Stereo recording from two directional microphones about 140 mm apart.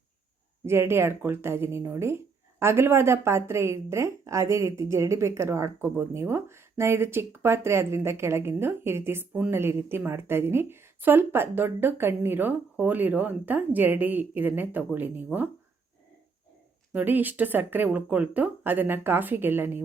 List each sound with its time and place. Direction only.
0.6 s speech: 15° right (ahead or behind)
16.9 s speech: 15° right (ahead or behind)